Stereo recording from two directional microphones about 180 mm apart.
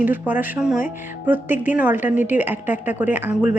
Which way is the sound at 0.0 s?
10° right (ahead or behind).